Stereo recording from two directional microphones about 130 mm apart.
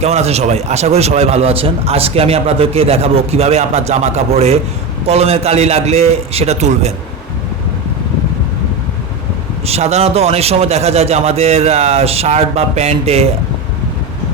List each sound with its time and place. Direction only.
0.0 s a man's voice: 55° right (ahead or behind)
9.6 s a man's voice: 55° right (ahead or behind)